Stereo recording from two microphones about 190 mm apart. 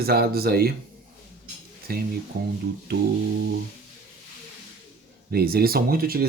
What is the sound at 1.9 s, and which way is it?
Speech, 55° right (ahead or behind).